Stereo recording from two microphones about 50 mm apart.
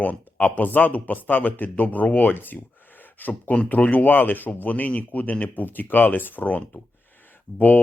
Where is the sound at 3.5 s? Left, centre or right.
Left.